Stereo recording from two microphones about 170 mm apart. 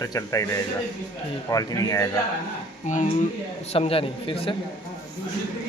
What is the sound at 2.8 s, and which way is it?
Speech, 45° left (ahead or behind).